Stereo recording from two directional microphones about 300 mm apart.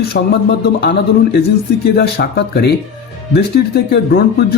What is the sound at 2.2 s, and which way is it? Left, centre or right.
Speech, left.